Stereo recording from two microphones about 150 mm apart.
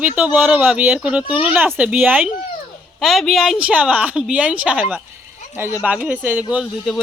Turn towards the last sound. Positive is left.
turn(degrees=0)  # may be behind; listen again after turning